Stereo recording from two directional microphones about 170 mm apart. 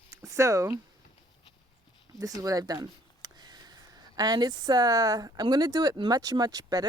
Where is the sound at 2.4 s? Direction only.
20° right (ahead or behind).